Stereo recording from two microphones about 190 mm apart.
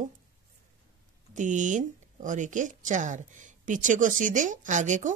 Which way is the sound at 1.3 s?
40° right (ahead or behind).